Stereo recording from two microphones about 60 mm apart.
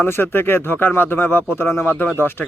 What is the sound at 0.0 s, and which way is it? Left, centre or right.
Speech, left.